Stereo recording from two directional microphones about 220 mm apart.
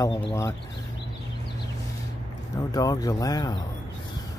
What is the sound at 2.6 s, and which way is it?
Speech, 15° left (ahead or behind).